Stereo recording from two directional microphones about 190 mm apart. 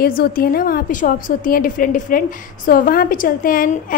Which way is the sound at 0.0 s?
50° left (ahead or behind).